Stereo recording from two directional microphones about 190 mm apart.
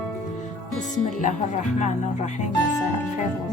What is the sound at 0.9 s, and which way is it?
Speech, 40° left (ahead or behind).